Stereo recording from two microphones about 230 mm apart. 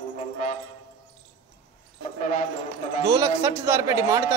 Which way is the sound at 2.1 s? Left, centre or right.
Left.